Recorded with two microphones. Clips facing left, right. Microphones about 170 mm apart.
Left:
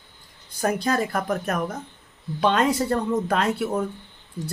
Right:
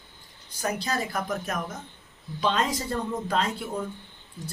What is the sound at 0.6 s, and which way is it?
Speech, 55° left (ahead or behind).